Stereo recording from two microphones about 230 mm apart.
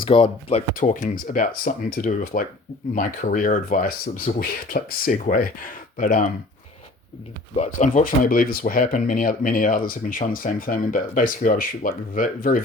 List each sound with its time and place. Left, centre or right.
0.0 s speech: left
7.5 s speech: left